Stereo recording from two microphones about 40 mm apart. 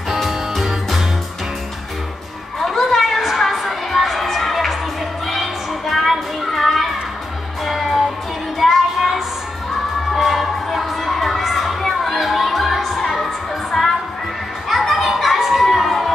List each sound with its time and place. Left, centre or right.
0.1 s music: centre
2.6 s a sound: centre
5.3 s children playing: centre
7.6 s music: centre
8.5 s child singing: centre
10.1 s crowd: centre
13.7 s music: centre
14.7 s children playing: centre